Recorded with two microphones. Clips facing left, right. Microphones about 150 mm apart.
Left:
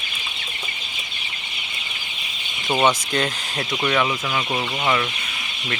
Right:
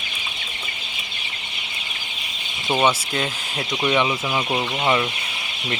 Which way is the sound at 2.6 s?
5° right (ahead or behind).